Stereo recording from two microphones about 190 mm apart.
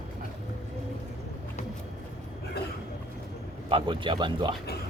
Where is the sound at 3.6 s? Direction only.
25° right (ahead or behind).